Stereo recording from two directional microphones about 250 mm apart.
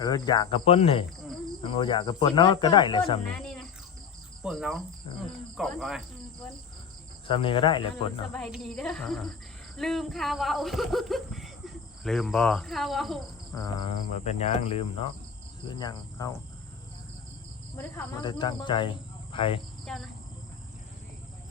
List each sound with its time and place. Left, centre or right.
0.0 s insect: centre
3.3 s cricket: centre
4.4 s speech: centre
7.3 s insect: left
8.3 s speech: centre
13.5 s insect: centre
15.6 s speech: centre
17.7 s speech: centre
19.3 s insect: left
19.8 s cricket: centre